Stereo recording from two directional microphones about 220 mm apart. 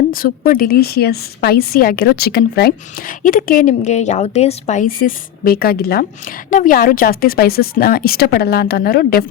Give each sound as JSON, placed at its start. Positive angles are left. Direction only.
{"t": 0.1, "sound": "a woman's voice", "side_deg": 40}